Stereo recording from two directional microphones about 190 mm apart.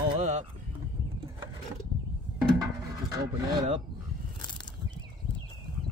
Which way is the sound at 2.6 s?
20° right (ahead or behind).